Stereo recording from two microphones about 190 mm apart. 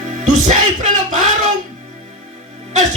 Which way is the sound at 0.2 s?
40° right (ahead or behind).